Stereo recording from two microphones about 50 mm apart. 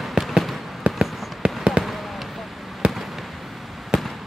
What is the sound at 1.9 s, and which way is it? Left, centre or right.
Fireworks, centre.